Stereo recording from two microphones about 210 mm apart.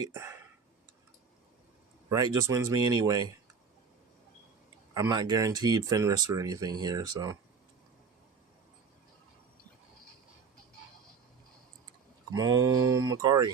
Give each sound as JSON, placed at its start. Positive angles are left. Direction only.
{"t": 0.0, "sound": "speech", "side_deg": -15}
{"t": 2.0, "sound": "speech", "side_deg": -15}
{"t": 4.9, "sound": "speech", "side_deg": -20}
{"t": 12.3, "sound": "speech", "side_deg": -15}